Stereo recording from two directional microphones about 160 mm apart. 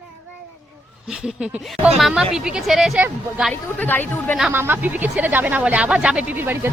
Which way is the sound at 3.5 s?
10° left (ahead or behind).